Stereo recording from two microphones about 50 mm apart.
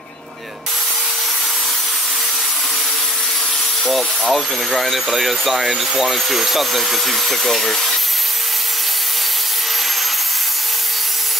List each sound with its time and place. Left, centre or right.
3.8 s speech: centre